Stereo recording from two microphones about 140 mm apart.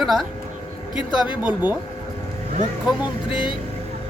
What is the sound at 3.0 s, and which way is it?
Speech, 35° left (ahead or behind).